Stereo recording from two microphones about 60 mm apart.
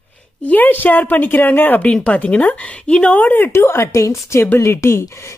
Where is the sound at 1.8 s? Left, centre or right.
Left.